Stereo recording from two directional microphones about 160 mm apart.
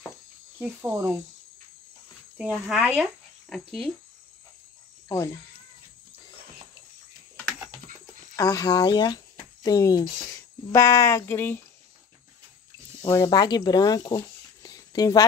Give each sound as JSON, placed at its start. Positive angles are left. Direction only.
{"t": 0.6, "sound": "speech", "side_deg": -15}
{"t": 2.3, "sound": "speech", "side_deg": -5}
{"t": 5.0, "sound": "speech", "side_deg": 20}
{"t": 8.4, "sound": "speech", "side_deg": 20}
{"t": 13.0, "sound": "speech", "side_deg": 20}